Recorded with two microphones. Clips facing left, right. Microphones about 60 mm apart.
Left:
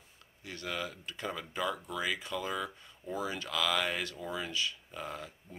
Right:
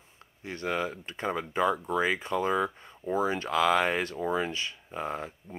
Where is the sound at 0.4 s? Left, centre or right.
Right.